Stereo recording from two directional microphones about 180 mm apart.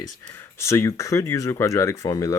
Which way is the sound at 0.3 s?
15° left (ahead or behind).